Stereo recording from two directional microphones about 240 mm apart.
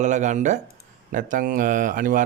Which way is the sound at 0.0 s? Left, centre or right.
Right.